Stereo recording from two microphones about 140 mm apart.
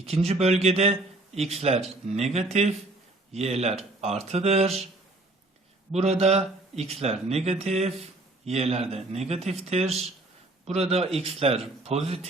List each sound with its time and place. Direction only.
0.3 s speech: 50° right (ahead or behind)
5.9 s speech: 50° right (ahead or behind)